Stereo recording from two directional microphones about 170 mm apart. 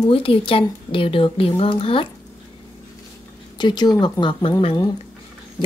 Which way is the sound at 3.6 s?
25° left (ahead or behind).